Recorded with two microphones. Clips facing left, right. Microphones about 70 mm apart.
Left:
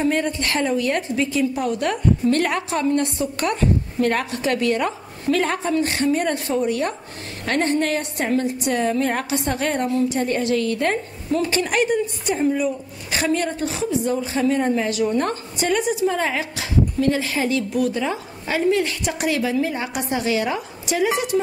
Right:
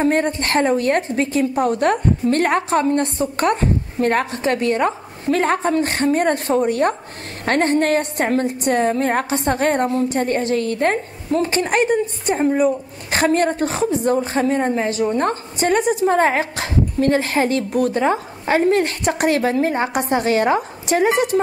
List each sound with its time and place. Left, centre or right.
0.0 s a woman's voice: right